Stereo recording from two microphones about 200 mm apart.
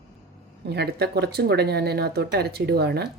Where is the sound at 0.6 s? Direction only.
55° right (ahead or behind).